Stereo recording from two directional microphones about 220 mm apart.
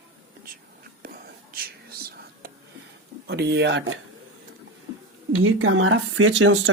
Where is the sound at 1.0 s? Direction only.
40° right (ahead or behind).